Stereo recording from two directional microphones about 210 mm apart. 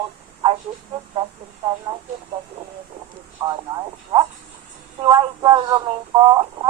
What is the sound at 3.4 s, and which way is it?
Speech, 20° right (ahead or behind).